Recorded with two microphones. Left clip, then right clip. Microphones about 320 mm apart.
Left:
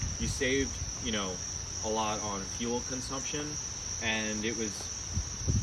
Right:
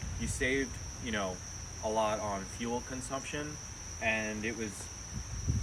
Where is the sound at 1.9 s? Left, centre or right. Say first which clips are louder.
Right 1 dB; centre.